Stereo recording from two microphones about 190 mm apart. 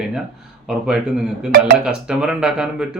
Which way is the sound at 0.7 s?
5° right (ahead or behind).